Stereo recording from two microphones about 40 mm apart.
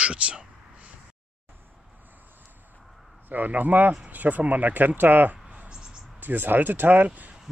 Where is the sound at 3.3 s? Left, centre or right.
Right.